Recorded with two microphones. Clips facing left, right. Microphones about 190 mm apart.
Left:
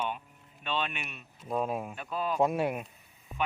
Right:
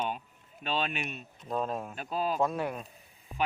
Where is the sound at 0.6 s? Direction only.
40° right (ahead or behind).